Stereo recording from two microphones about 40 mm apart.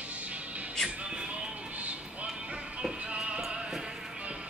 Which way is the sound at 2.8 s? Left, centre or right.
Right.